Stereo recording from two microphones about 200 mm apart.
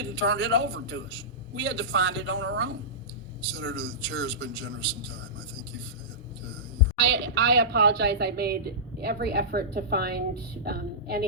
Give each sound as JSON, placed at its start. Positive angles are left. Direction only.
{"t": 0.3, "sound": "a man's voice", "side_deg": -65}
{"t": 7.0, "sound": "a woman's voice", "side_deg": -60}